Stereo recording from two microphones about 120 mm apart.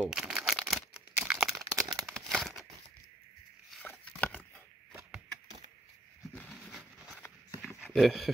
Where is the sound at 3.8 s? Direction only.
10° left (ahead or behind).